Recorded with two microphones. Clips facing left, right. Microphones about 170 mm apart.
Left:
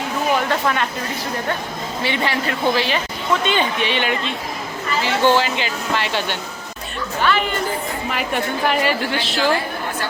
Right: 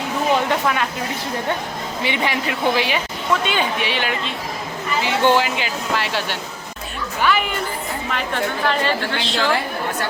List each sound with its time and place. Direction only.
0.6 s speech: 5° right (ahead or behind)
2.0 s speech: 15° right (ahead or behind)
5.0 s speech: 15° right (ahead or behind)
5.5 s speech: 5° right (ahead or behind)
8.1 s a woman's voice: 15° left (ahead or behind)